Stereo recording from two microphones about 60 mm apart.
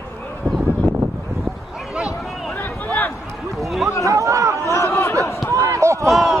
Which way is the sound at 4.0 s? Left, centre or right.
Right.